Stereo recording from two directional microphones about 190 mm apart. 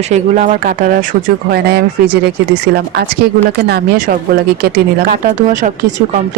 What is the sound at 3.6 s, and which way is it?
Speech, 55° right (ahead or behind).